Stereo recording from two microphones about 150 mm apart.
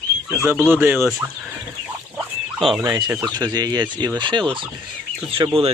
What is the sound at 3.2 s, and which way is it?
Speech, 25° right (ahead or behind).